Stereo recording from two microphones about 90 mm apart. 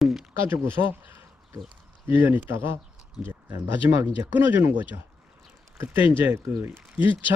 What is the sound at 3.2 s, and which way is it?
Speech, 10° right (ahead or behind).